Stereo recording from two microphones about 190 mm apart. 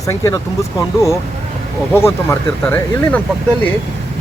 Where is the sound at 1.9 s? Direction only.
15° left (ahead or behind).